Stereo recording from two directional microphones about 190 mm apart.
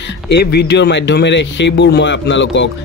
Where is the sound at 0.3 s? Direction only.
60° left (ahead or behind).